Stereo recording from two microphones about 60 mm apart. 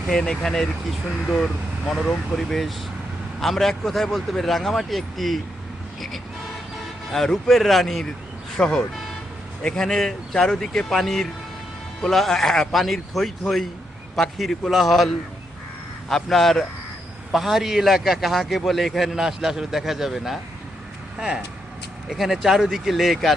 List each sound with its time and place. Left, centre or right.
0.1 s a man's voice: centre
7.1 s a man's voice: centre
8.5 s a man's voice: centre